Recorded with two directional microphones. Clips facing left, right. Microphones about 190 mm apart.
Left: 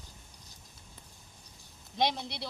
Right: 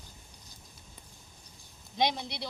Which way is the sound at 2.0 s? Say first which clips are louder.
Right 1 dB; centre (ahead or behind).